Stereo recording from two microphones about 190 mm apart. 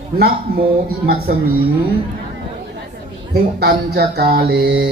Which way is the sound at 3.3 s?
55° right (ahead or behind).